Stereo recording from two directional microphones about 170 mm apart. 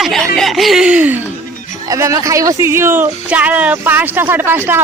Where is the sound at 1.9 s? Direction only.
20° right (ahead or behind).